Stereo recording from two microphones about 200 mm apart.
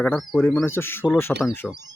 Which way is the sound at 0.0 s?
5° left (ahead or behind).